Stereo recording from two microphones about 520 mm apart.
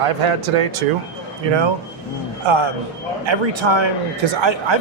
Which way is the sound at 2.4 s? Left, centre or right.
Right.